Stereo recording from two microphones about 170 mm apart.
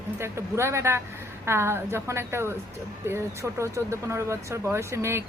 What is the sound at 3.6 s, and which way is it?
Speech, 15° right (ahead or behind).